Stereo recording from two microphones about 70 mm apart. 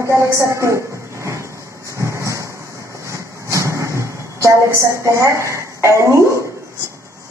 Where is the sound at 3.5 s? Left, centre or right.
Right.